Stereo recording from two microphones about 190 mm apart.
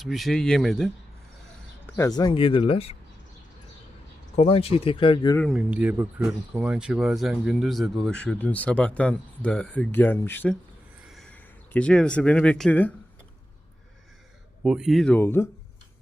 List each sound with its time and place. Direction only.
0.0 s speech: centre (ahead or behind)
2.0 s speech: 20° left (ahead or behind)
4.4 s speech: 30° left (ahead or behind)
5.4 s speech: centre (ahead or behind)
11.0 s a sound: centre (ahead or behind)
14.6 s speech: 5° right (ahead or behind)